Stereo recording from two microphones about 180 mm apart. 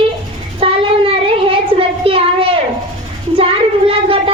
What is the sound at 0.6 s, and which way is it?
Child singing, 30° right (ahead or behind).